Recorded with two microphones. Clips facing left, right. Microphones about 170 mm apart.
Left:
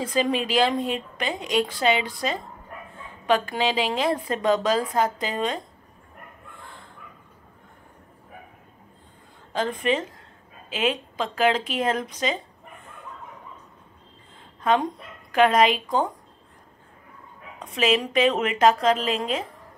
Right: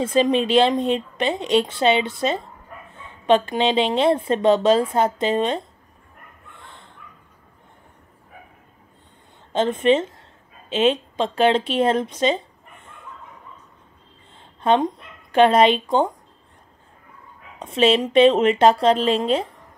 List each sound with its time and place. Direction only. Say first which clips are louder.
0.0 s speech: right 6 dB; 25° right (ahead or behind)
9.5 s speech: right 7 dB; 25° right (ahead or behind)
14.6 s speech: right 4 dB; 30° right (ahead or behind)
17.6 s speech: right 5 dB; 25° right (ahead or behind)